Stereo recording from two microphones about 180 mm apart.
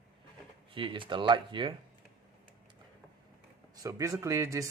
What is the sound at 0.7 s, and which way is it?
Speech, 30° right (ahead or behind).